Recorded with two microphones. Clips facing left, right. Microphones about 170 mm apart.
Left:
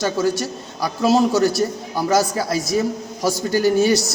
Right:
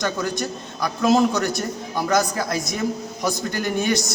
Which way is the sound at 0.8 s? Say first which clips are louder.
Left 1 dB; 35° left (ahead or behind).